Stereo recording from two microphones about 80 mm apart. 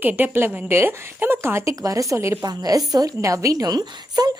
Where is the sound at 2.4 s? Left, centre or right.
Right.